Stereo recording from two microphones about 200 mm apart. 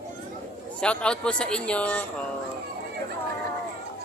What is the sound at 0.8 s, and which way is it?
A man's voice, 5° left (ahead or behind).